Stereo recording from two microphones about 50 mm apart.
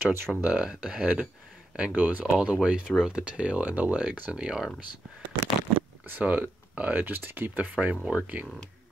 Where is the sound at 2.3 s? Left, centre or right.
Centre.